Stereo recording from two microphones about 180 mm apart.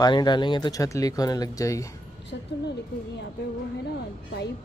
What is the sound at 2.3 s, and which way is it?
Speech, 70° left (ahead or behind).